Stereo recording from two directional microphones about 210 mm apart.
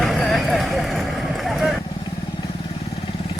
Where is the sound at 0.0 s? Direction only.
Centre (ahead or behind).